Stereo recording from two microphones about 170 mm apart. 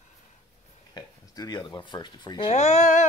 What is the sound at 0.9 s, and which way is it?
Speech, 25° left (ahead or behind).